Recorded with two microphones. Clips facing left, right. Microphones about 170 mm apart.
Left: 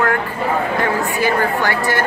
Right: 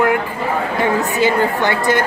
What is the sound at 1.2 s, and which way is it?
Speech, 20° right (ahead or behind).